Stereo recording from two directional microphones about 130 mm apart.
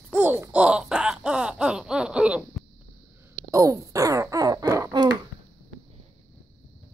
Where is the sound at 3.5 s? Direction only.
25° right (ahead or behind).